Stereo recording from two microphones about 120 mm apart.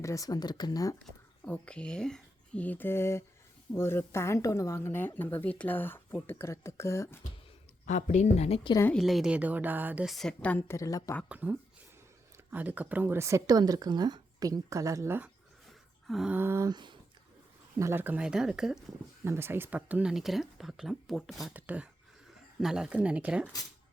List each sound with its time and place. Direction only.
0.0 s speech: 25° left (ahead or behind)
1.5 s speech: 10° left (ahead or behind)
7.9 s a woman's voice: 90° left; by 8.6 s 60° left (ahead or behind)
9.0 s speech: centre (ahead or behind)
10.1 s speech: 5° left (ahead or behind)
10.8 s speech: 25° left (ahead or behind)
11.3 s speech: 10° right (ahead or behind)
16.0 s a sound: centre (ahead or behind)
16.3 s speech: 20° right (ahead or behind)
16.6 s speech: 40° right (ahead or behind)
17.7 s speech: 20° right (ahead or behind); by 18.8 s 5° right (ahead or behind)
19.2 s speech: 20° right (ahead or behind); by 21.5 s centre (ahead or behind)
21.5 s speech: 10° right (ahead or behind)